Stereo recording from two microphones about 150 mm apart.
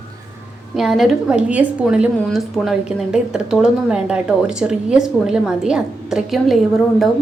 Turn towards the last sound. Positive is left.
turn(degrees=0)  # may be behind; listen again after turning